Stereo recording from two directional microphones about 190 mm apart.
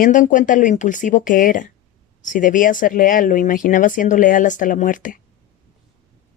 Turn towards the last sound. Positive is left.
turn(degrees=45)  # may be behind; listen again after turning